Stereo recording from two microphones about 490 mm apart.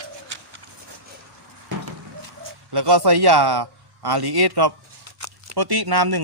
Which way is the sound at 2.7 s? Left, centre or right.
Right.